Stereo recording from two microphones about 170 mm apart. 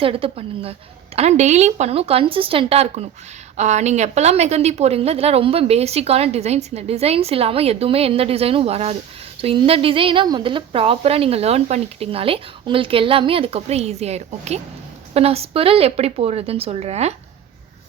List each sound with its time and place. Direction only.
0.0 s a woman's voice: 35° right (ahead or behind)